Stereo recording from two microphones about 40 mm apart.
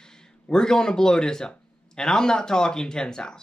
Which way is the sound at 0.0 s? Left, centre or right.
Centre.